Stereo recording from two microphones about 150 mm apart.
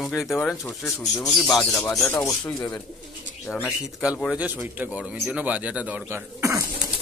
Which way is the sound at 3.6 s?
5° right (ahead or behind).